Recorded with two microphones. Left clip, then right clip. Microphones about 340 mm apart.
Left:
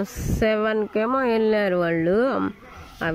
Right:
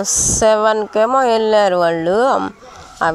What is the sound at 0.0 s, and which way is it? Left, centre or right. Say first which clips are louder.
A woman's voice: right 10 dB; right.